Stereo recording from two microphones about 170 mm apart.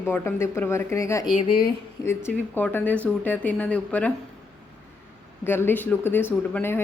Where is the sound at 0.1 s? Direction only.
15° left (ahead or behind).